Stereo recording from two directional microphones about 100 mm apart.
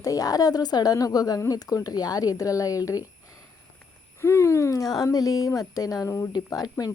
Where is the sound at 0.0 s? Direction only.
35° left (ahead or behind).